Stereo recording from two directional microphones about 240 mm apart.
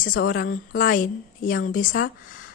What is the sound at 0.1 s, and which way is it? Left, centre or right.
Speech, left.